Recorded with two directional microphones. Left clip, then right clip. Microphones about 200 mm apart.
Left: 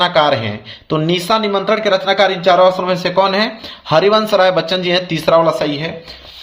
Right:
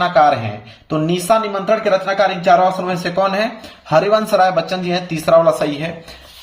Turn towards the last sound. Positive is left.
turn(degrees=25)  # may be behind; listen again after turning